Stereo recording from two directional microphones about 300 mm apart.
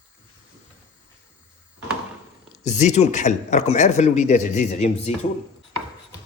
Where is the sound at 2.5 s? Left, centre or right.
Left.